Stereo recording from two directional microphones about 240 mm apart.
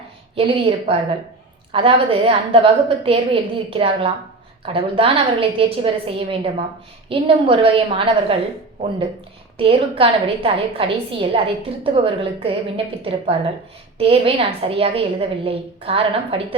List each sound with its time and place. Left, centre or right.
0.3 s a woman's voice: right
9.6 s a woman's voice: right